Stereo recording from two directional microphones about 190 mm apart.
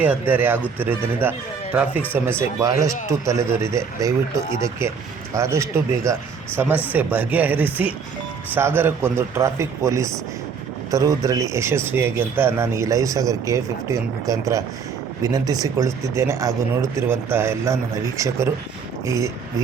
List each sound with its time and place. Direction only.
0.0 s speech: 10° right (ahead or behind)
19.0 s speech: 15° right (ahead or behind)